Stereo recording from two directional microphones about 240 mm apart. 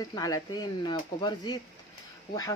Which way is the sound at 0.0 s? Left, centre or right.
Centre.